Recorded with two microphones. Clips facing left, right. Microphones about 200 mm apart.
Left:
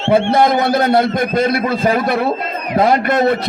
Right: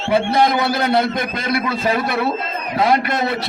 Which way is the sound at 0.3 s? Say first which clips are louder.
Left 4 dB; 50° left (ahead or behind).